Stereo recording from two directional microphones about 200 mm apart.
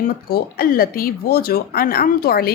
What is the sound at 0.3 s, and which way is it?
A woman's voice, 50° left (ahead or behind).